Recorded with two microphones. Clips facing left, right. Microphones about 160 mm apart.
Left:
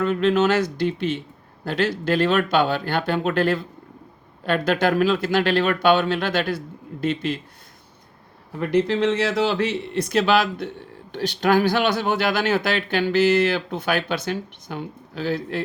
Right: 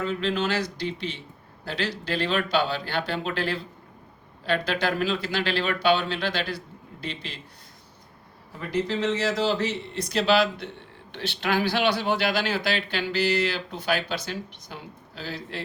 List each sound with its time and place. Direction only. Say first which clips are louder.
0.0 s speech: left 7 dB; 55° left (ahead or behind)
8.5 s speech: left 7 dB; 60° left (ahead or behind)
11.1 s speech: left 7 dB; 40° left (ahead or behind)